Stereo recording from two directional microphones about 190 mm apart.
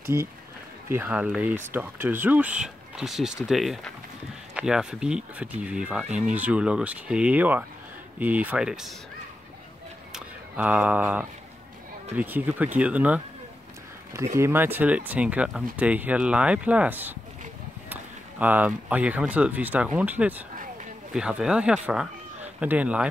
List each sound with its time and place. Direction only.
0.0 s speech: 15° right (ahead or behind)
10.1 s speech: 5° right (ahead or behind)
14.3 s speech: 15° right (ahead or behind)
18.4 s speech: 10° right (ahead or behind)